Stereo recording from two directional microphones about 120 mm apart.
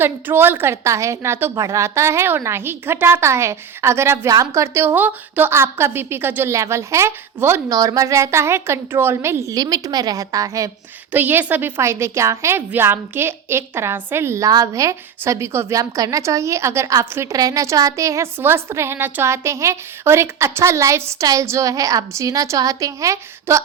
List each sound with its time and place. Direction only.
0.0 s a woman's voice: 20° right (ahead or behind)
11.1 s a woman's voice: 15° right (ahead or behind)